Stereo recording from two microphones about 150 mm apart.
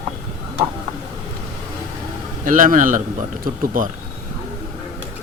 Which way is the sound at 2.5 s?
65° right (ahead or behind).